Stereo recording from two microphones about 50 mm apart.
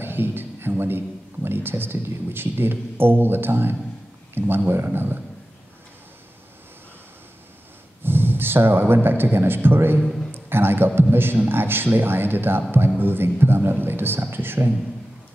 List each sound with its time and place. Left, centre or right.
0.0 s a man's voice: right
8.0 s a man's voice: right